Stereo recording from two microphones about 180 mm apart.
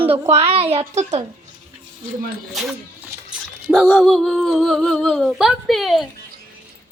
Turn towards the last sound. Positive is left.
turn(degrees=0)  # may be behind; listen again after turning